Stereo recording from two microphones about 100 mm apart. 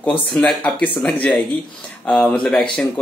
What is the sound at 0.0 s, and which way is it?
Speech, 10° left (ahead or behind).